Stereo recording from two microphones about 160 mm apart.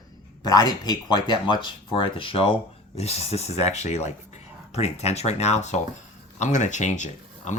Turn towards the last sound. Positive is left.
turn(degrees=50)  # may be behind; listen again after turning